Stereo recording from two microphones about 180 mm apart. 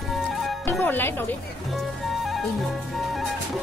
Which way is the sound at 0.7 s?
10° left (ahead or behind).